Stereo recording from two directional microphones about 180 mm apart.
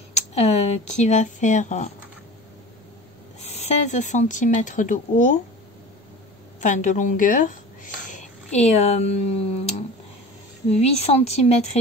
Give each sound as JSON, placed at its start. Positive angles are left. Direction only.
{"t": 0.1, "sound": "speech", "side_deg": 35}
{"t": 3.4, "sound": "speech", "side_deg": 40}
{"t": 6.6, "sound": "speech", "side_deg": 45}